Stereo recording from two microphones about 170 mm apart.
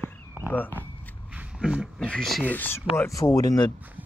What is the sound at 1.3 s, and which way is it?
Speech, 5° right (ahead or behind).